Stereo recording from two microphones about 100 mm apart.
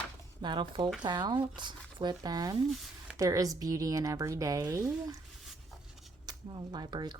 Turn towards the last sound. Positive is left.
turn(degrees=-50)  # may be behind; listen again after turning